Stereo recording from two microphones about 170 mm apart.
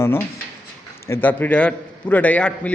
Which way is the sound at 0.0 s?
15° left (ahead or behind).